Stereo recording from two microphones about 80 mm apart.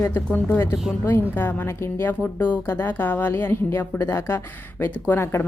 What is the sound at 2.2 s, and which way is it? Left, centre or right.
A woman's voice, centre.